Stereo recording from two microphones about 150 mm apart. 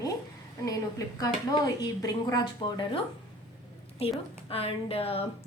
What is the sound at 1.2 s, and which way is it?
A woman's voice, 25° left (ahead or behind).